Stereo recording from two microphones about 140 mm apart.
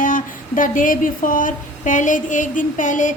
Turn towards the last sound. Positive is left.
turn(degrees=65)  # may be behind; listen again after turning